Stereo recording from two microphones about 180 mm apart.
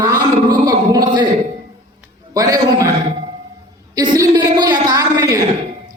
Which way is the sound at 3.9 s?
20° right (ahead or behind).